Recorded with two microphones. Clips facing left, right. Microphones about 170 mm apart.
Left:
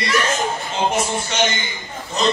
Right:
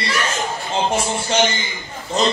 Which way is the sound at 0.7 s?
30° right (ahead or behind).